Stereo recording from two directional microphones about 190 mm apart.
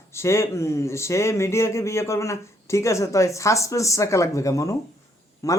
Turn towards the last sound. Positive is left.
turn(degrees=15)  # may be behind; listen again after turning